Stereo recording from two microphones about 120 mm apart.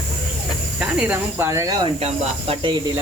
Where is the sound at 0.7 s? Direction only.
5° right (ahead or behind).